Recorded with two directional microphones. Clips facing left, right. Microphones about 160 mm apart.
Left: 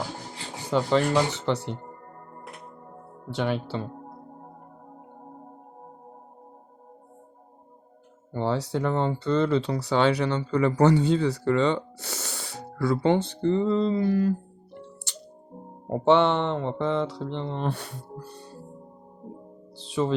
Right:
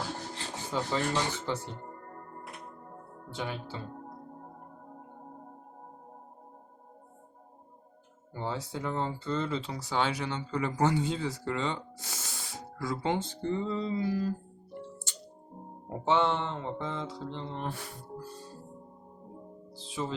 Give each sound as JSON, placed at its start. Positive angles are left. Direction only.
{"t": 0.7, "sound": "speech", "side_deg": 75}
{"t": 3.2, "sound": "speech", "side_deg": 75}
{"t": 8.3, "sound": "speech", "side_deg": 70}
{"t": 19.7, "sound": "music", "side_deg": 70}